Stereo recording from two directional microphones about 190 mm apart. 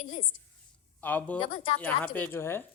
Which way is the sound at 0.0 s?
35° left (ahead or behind).